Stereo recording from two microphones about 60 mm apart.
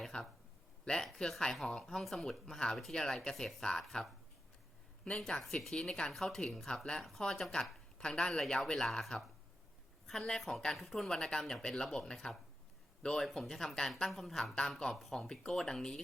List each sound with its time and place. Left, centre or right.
0.0 s a sound: centre
0.9 s speech: centre
5.0 s speech: centre
5.4 s speech: centre